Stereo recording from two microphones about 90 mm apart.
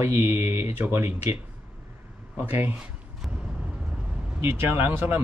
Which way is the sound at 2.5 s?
20° right (ahead or behind).